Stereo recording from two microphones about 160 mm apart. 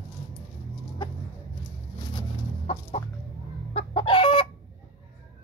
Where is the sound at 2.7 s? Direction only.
40° left (ahead or behind).